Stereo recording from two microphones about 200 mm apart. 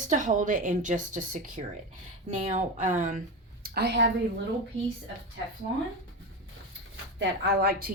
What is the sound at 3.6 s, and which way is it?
Speech, 50° right (ahead or behind).